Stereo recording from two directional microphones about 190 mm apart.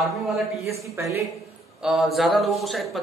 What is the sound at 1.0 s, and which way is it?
Speech, 15° right (ahead or behind).